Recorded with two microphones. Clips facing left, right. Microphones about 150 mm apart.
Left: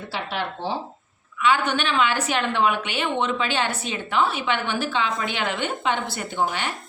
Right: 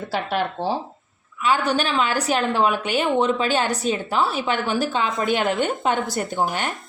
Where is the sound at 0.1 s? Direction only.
45° right (ahead or behind).